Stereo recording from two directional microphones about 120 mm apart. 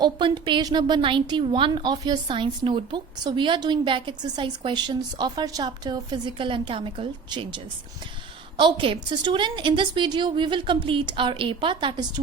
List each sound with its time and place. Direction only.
0.0 s a woman's voice: 45° right (ahead or behind)